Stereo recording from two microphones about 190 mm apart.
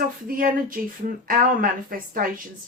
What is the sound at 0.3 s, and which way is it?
Speech, 45° right (ahead or behind).